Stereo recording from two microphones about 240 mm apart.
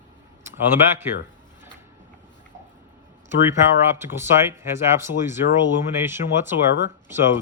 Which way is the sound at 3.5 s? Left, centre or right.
Centre.